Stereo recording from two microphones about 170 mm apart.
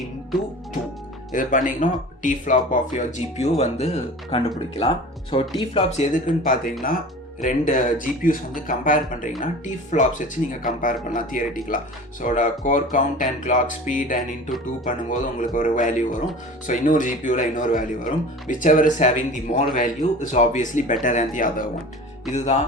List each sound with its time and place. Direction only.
1.3 s speech: 50° left (ahead or behind)